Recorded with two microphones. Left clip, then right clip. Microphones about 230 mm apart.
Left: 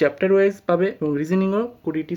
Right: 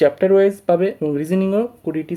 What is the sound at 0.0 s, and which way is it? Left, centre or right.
Speech, centre.